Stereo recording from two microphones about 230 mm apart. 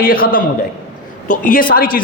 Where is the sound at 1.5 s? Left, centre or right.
Left.